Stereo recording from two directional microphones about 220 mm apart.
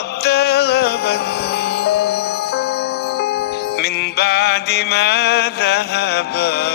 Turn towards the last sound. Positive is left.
turn(degrees=45)  # may be behind; listen again after turning